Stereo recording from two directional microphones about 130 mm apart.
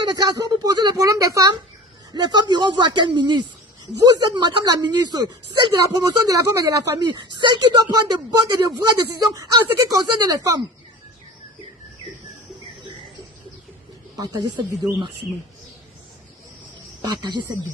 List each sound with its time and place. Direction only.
0.1 s a woman's voice: 30° right (ahead or behind)
14.2 s a woman's voice: 30° right (ahead or behind)
17.0 s a woman's voice: 35° right (ahead or behind)